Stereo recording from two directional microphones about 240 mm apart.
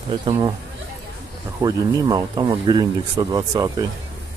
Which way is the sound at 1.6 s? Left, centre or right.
Centre.